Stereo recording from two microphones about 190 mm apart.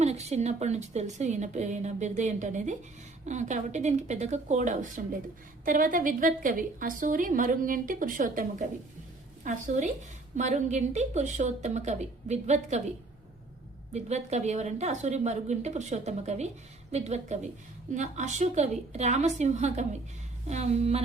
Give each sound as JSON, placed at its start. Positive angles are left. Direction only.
{"t": 0.0, "sound": "a woman's voice", "side_deg": -35}
{"t": 13.9, "sound": "a woman's voice", "side_deg": -35}